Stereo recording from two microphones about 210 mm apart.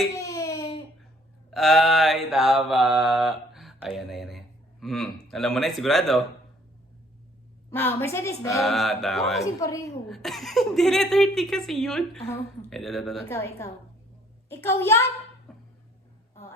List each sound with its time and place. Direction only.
0.1 s baby cry: 15° left (ahead or behind)
1.5 s mantra: centre (ahead or behind)
7.9 s a woman's voice: 10° left (ahead or behind)
8.6 s a woman's voice: centre (ahead or behind)
9.4 s a woman's voice: 15° left (ahead or behind)
10.1 s a woman's voice: centre (ahead or behind)
13.3 s a woman's voice: 15° left (ahead or behind)